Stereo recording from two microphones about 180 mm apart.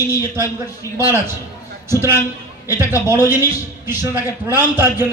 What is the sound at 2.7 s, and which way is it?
A man's voice, 10° right (ahead or behind).